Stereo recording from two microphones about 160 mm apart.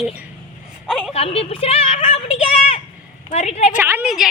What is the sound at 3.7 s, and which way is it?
Speech, 10° right (ahead or behind).